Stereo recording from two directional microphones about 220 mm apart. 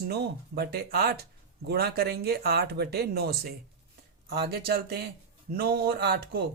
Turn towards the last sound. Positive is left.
turn(degrees=-45)  # may be behind; listen again after turning